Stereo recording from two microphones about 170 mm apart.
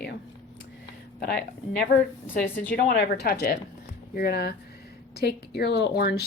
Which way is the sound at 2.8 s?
65° left (ahead or behind).